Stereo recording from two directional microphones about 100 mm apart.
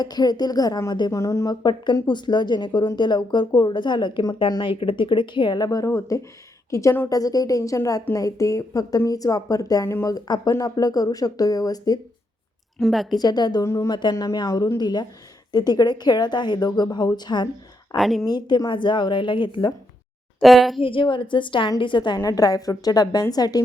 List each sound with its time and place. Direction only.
0.0 s speech: 40° left (ahead or behind)
1.2 s a woman's voice: 30° left (ahead or behind)
12.8 s speech: centre (ahead or behind)
13.1 s speech: 45° left (ahead or behind)
13.7 s a woman's voice: 35° left (ahead or behind)
13.9 s speech: 45° left (ahead or behind)
17.9 s speech: centre (ahead or behind)
18.3 s speech: 45° left (ahead or behind)
20.4 s speech: centre (ahead or behind)
20.8 s a woman's voice: 60° left (ahead or behind)
22.2 s a woman's voice: 35° left (ahead or behind)